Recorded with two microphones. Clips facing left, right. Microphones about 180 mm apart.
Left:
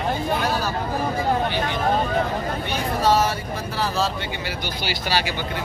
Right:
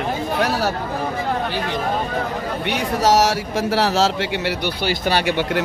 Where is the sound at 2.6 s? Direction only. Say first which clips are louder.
Right 4 dB; 80° right.